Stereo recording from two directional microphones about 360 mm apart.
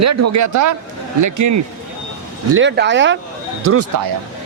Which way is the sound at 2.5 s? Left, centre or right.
Right.